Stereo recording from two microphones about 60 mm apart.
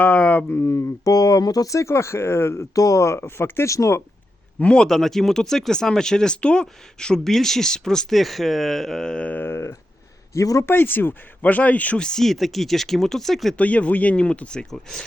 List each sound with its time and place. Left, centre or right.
0.0 s speech: left
0.5 s speech: left
1.0 s speech: left
1.9 s speech: left
2.7 s speech: left
3.7 s speech: left
4.6 s speech: centre
4.9 s speech: centre
9.2 s speech: left
10.3 s speech: left
10.7 s speech: left
11.9 s speech: centre
13.6 s speech: left
14.7 s speech: centre